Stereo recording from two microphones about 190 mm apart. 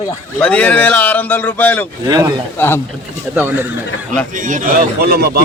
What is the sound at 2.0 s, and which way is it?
Speech, 20° right (ahead or behind).